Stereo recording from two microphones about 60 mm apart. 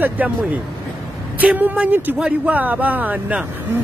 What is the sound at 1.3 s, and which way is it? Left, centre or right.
Speech, right.